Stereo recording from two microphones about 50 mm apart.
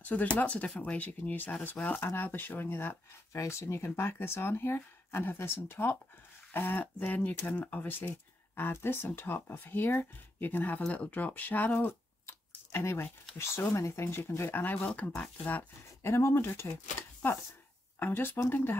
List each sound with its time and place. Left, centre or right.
0.0 s speech: left
1.3 s speech: left
3.3 s speech: left
12.3 s a sound: left
13.4 s speech: left
14.5 s speech: left
16.0 s speech: left
17.9 s speech: left